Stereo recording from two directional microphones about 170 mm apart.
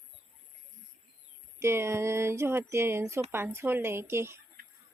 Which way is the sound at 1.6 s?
15° right (ahead or behind).